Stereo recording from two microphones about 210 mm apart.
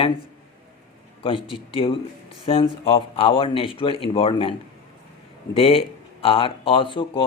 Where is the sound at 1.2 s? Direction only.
25° left (ahead or behind).